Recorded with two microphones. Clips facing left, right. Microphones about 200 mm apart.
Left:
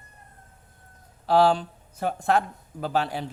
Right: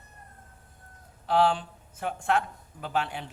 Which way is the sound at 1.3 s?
35° left (ahead or behind).